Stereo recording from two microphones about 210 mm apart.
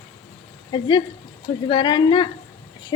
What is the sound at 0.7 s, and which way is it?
Speech, 20° left (ahead or behind).